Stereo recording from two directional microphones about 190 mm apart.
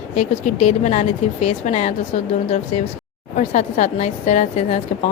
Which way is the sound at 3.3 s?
40° left (ahead or behind).